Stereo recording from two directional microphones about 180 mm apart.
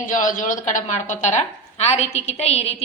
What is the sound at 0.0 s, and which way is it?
A woman's voice, 45° left (ahead or behind).